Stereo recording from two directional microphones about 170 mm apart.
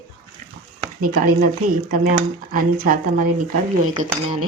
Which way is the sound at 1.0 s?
60° right (ahead or behind).